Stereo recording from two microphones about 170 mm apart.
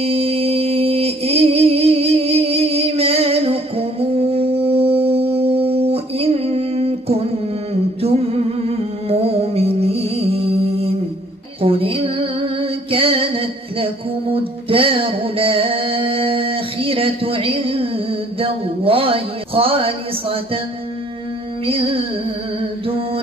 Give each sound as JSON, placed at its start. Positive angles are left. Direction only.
{"t": 0.0, "sound": "music", "side_deg": -35}
{"t": 21.6, "sound": "music", "side_deg": -30}
{"t": 22.8, "sound": "mantra", "side_deg": -35}